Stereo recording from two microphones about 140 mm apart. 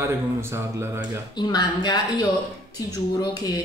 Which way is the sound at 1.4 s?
30° left (ahead or behind).